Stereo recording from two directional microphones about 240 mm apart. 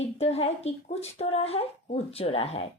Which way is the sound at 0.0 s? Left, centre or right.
Left.